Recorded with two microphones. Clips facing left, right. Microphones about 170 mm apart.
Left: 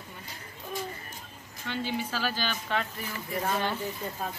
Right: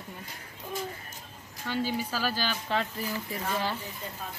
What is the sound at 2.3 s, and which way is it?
Speech, 30° right (ahead or behind).